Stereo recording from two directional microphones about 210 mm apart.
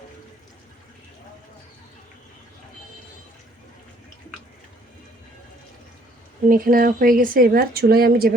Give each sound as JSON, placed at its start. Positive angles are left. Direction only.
{"t": 6.5, "sound": "a woman's voice", "side_deg": -40}